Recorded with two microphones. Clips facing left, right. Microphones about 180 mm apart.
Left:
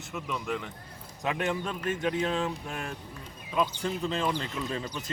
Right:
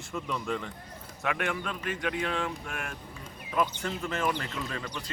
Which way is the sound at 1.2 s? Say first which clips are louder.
Left 2 dB; 20° left (ahead or behind).